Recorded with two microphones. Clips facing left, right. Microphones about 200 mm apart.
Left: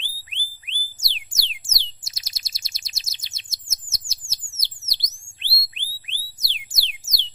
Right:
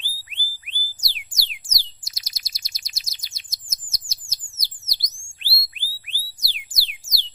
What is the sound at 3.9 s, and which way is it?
Bird, 25° left (ahead or behind).